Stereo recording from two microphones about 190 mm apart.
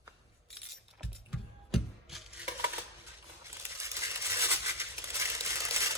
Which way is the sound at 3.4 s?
15° right (ahead or behind).